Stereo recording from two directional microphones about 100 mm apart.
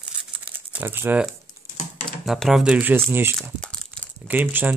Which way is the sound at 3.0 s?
25° right (ahead or behind).